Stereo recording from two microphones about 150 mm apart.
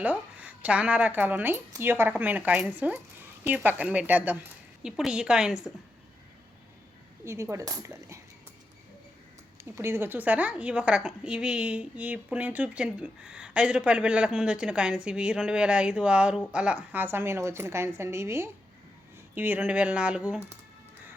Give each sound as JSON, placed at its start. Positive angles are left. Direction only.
{"t": 0.0, "sound": "a woman's voice", "side_deg": -10}
{"t": 7.3, "sound": "speech", "side_deg": -20}
{"t": 9.7, "sound": "a woman's voice", "side_deg": -15}